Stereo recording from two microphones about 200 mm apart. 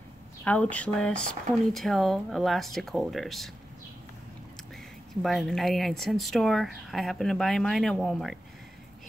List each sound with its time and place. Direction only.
0.4 s speech: 5° left (ahead or behind)
4.7 s speech: centre (ahead or behind)